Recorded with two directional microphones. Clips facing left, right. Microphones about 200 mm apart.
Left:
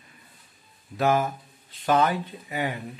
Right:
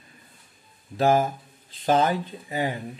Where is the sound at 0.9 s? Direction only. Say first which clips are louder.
Right 2 dB; 30° right (ahead or behind).